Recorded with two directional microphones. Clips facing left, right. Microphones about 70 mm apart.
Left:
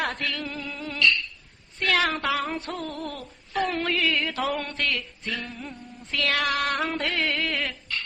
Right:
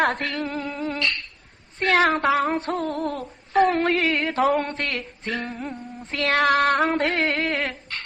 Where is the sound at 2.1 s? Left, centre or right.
Right.